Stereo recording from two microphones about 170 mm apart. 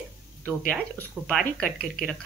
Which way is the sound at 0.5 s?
5° right (ahead or behind).